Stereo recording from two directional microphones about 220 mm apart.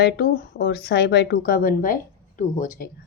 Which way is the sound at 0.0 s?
50° left (ahead or behind).